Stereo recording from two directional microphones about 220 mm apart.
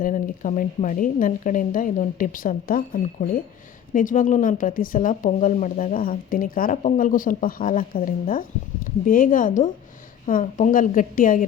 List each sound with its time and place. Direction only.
0.0 s a woman's voice: 35° left (ahead or behind)